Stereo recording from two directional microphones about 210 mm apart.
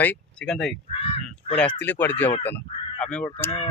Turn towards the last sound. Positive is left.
turn(degrees=5)  # may be behind; listen again after turning